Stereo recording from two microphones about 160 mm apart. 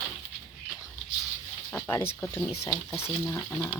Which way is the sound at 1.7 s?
20° left (ahead or behind).